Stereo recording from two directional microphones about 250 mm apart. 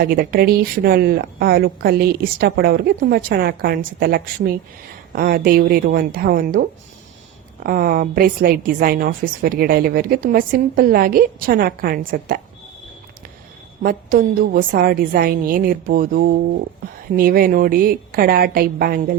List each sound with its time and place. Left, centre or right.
0.0 s a woman's voice: right
13.8 s a woman's voice: right